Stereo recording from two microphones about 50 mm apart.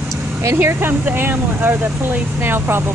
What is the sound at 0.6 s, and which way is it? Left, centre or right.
Speech, right.